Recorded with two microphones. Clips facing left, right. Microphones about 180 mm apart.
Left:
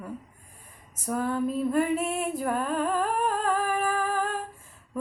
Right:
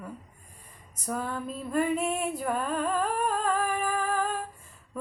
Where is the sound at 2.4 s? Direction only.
5° left (ahead or behind).